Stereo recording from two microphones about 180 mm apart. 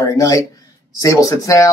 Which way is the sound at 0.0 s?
20° left (ahead or behind).